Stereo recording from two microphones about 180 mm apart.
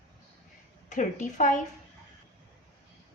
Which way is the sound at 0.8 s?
45° left (ahead or behind).